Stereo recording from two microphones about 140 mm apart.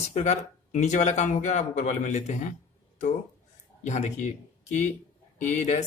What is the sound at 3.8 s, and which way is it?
Speech, 55° left (ahead or behind).